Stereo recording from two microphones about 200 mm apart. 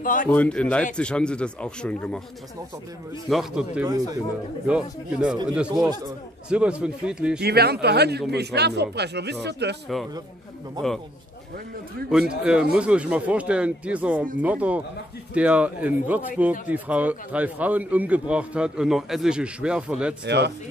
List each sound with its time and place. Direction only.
0.0 s speech: 45° left (ahead or behind)
0.3 s speech: 5° left (ahead or behind)
3.3 s speech: centre (ahead or behind)
7.3 s speech: 50° right (ahead or behind)
12.1 s a man's voice: 5° right (ahead or behind)
20.2 s speech: 55° right (ahead or behind)